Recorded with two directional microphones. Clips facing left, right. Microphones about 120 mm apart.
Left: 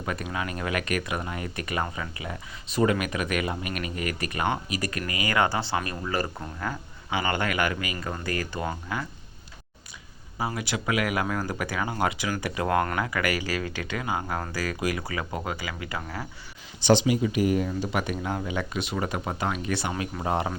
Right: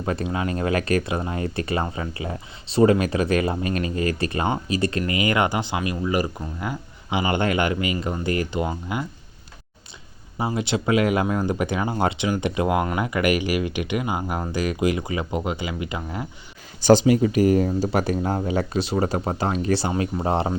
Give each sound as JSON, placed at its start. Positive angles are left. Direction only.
{"t": 0.0, "sound": "speech", "side_deg": -30}
{"t": 10.3, "sound": "speech", "side_deg": -25}
{"t": 16.8, "sound": "speech", "side_deg": -40}